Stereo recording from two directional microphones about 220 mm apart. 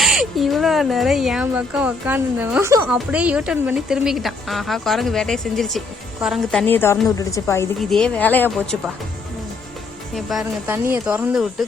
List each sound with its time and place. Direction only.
0.0 s a woman's voice: centre (ahead or behind)
7.8 s speech: centre (ahead or behind)
10.2 s speech: centre (ahead or behind)